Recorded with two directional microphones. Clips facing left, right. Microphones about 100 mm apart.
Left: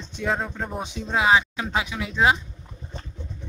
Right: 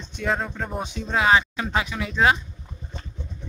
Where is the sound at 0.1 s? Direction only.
20° left (ahead or behind).